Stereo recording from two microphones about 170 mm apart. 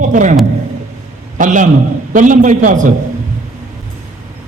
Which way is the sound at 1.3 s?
50° right (ahead or behind).